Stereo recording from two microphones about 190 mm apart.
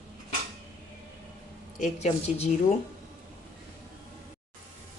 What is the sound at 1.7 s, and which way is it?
Speech, 35° left (ahead or behind).